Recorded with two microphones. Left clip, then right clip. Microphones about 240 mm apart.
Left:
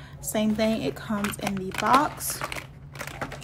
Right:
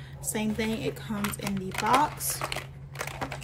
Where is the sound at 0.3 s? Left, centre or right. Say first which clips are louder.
Left 6 dB; centre.